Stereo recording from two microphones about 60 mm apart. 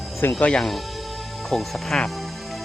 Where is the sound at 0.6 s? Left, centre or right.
Centre.